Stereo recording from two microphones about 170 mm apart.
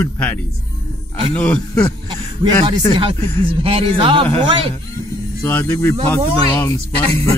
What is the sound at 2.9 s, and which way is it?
A man's voice, 30° right (ahead or behind).